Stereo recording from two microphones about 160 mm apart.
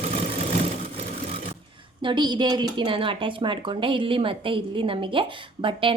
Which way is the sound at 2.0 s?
30° right (ahead or behind).